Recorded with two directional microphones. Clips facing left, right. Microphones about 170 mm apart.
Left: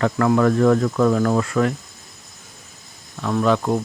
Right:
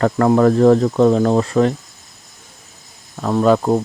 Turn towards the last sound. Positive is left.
turn(degrees=-30)  # may be behind; listen again after turning